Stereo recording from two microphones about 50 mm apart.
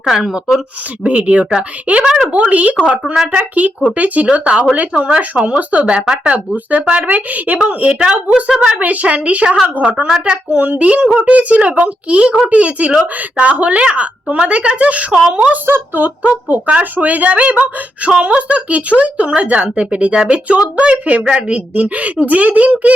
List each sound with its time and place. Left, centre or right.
0.0 s a woman's voice: centre
1.0 s speech: right
7.9 s a woman's voice: centre
8.8 s speech: right
10.1 s a woman's voice: centre
10.5 s speech: right
15.1 s a woman's voice: centre
15.6 s speech: right